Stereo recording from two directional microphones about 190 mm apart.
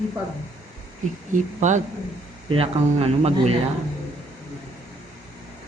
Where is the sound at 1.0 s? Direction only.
40° right (ahead or behind).